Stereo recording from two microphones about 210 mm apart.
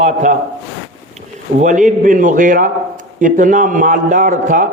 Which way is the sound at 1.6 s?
35° right (ahead or behind).